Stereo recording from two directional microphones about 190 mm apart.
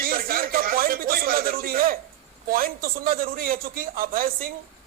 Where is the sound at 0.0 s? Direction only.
50° right (ahead or behind).